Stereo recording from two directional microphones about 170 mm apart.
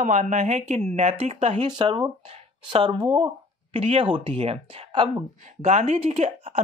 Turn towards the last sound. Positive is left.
turn(degrees=-35)  # may be behind; listen again after turning